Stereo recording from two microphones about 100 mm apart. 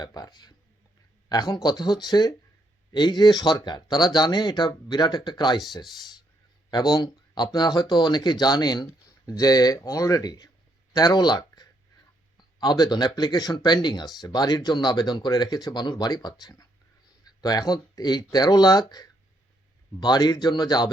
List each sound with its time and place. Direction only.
0.0 s speech: 40° left (ahead or behind)
6.7 s speech: 40° left (ahead or behind)